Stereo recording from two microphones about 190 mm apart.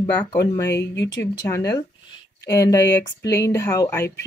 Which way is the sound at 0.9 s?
65° left (ahead or behind).